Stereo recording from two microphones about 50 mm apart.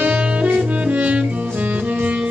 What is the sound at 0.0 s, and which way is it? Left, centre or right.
Saxophone, right.